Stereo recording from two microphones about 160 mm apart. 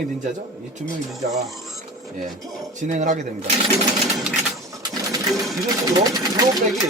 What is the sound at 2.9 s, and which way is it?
Speech, 50° right (ahead or behind).